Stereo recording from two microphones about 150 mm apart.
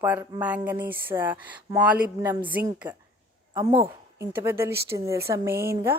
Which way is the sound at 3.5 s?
25° right (ahead or behind).